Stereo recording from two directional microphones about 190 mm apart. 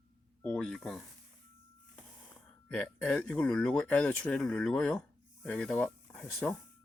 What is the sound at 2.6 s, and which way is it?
Speech, 5° left (ahead or behind).